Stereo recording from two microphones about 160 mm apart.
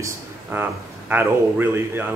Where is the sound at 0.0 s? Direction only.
10° right (ahead or behind).